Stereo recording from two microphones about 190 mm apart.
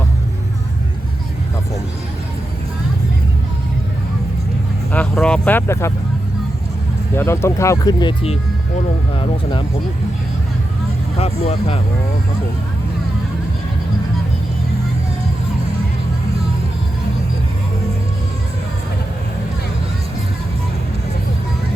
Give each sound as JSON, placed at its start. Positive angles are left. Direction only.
{"t": 4.9, "sound": "speech", "side_deg": 5}
{"t": 7.2, "sound": "speech", "side_deg": 15}
{"t": 11.2, "sound": "speech", "side_deg": 30}